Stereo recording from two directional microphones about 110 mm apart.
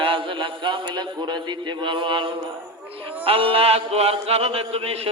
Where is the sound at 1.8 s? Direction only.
45° right (ahead or behind).